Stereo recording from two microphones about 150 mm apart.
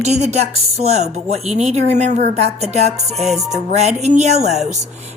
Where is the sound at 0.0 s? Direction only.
50° right (ahead or behind).